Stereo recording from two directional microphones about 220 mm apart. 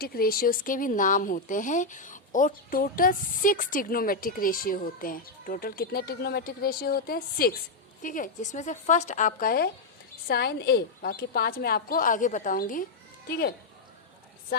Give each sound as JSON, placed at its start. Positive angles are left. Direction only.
{"t": 0.0, "sound": "a woman's voice", "side_deg": 45}